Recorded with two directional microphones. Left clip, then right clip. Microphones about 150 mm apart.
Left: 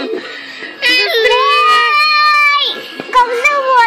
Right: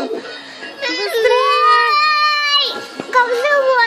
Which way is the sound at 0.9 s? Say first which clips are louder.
Left 8 dB; 15° left (ahead or behind).